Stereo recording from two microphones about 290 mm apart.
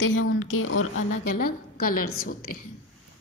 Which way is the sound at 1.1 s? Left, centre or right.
Left.